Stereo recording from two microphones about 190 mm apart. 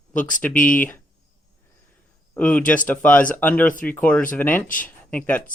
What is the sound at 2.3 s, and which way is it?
Speech, 5° left (ahead or behind).